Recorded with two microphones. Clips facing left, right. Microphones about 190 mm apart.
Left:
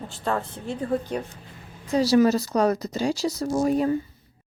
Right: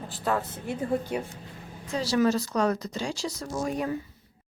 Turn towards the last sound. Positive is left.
turn(degrees=35)  # may be behind; listen again after turning